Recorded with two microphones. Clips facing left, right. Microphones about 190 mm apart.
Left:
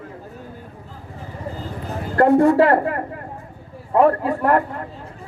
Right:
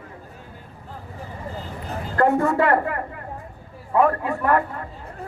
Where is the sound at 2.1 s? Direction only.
35° left (ahead or behind).